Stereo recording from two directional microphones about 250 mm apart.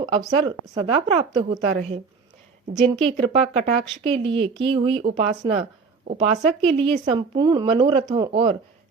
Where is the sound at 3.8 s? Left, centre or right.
Right.